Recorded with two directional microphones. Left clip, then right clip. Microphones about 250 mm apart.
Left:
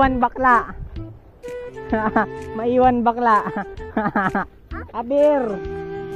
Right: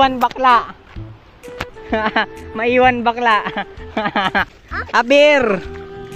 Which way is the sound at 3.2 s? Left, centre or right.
Centre.